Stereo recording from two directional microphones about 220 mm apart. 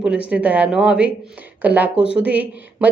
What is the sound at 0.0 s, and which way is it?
A woman's voice, 5° right (ahead or behind).